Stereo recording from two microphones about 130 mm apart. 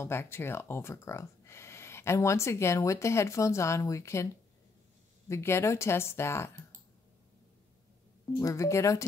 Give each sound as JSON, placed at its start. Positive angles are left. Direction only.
{"t": 0.0, "sound": "speech", "side_deg": 20}
{"t": 5.3, "sound": "speech", "side_deg": 20}
{"t": 8.4, "sound": "speech", "side_deg": 25}